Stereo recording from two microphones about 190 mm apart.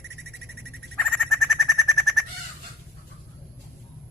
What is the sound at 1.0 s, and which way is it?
Bird, centre (ahead or behind).